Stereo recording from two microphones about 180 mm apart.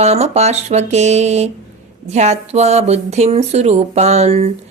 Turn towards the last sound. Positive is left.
turn(degrees=-35)  # may be behind; listen again after turning